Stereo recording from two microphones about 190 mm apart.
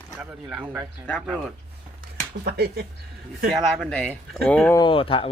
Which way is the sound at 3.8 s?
5° left (ahead or behind).